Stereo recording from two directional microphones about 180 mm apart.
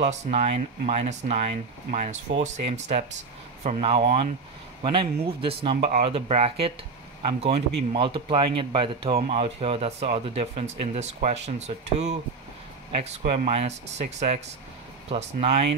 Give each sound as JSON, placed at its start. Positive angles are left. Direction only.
{"t": 0.0, "sound": "speech", "side_deg": -35}
{"t": 13.2, "sound": "speech", "side_deg": -50}
{"t": 13.5, "sound": "speech", "side_deg": -35}